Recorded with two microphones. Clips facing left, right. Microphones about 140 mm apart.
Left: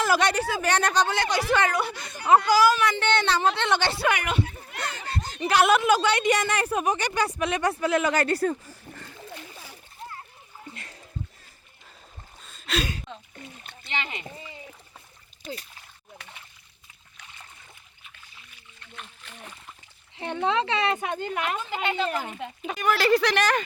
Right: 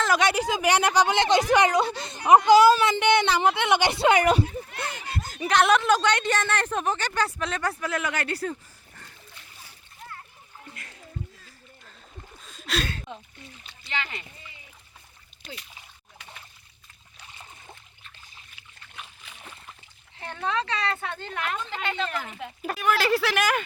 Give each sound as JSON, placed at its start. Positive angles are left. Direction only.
{"t": 0.0, "sound": "speech", "side_deg": 0}
{"t": 0.3, "sound": "speech", "side_deg": -15}
{"t": 3.0, "sound": "a woman's voice", "side_deg": -15}
{"t": 4.2, "sound": "speech", "side_deg": -40}
{"t": 4.8, "sound": "a woman's voice", "side_deg": -10}
{"t": 8.1, "sound": "speech", "side_deg": 40}
{"t": 9.0, "sound": "splash", "side_deg": 90}
{"t": 12.4, "sound": "a sound", "side_deg": 0}
{"t": 13.1, "sound": "a woman's voice", "side_deg": -10}
{"t": 13.8, "sound": "speech", "side_deg": 20}
{"t": 18.9, "sound": "splash", "side_deg": -5}
{"t": 20.1, "sound": "a woman's voice", "side_deg": 20}